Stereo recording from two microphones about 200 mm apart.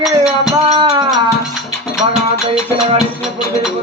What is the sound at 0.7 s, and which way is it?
Music, 25° right (ahead or behind).